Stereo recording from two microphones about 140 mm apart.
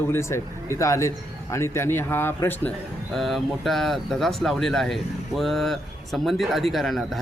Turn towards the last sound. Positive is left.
turn(degrees=0)  # may be behind; listen again after turning